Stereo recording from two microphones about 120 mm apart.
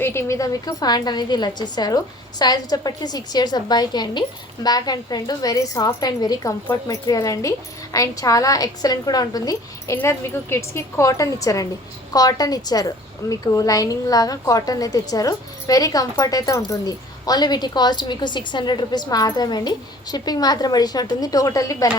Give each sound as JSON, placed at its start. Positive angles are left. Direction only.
{"t": 0.0, "sound": "a woman's voice", "side_deg": 20}